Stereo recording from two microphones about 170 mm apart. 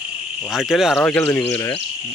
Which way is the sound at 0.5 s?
Centre (ahead or behind).